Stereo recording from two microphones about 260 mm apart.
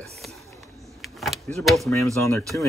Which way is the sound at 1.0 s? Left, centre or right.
Centre.